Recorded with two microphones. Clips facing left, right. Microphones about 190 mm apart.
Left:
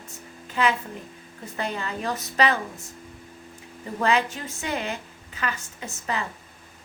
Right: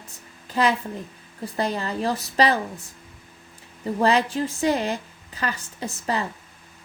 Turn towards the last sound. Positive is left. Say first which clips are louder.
# right 4 dB
turn(degrees=-35)  # may be behind; listen again after turning